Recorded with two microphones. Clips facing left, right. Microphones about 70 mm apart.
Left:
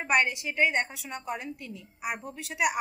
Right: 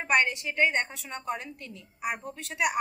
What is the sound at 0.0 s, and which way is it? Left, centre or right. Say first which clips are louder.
A woman's voice: even; centre.